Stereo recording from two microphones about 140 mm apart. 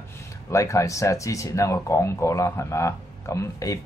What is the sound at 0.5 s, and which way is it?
A man's voice, 20° left (ahead or behind).